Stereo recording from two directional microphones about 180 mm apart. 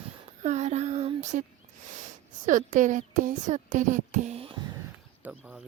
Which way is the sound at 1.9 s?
45° right (ahead or behind).